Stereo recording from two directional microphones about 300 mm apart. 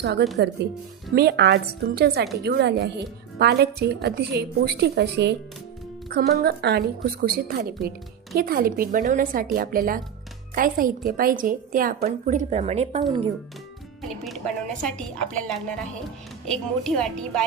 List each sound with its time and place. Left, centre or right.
0.0 s a woman's voice: right
14.0 s speech: centre